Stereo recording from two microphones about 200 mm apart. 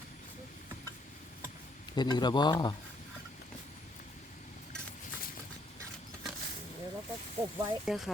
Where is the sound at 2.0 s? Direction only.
20° left (ahead or behind).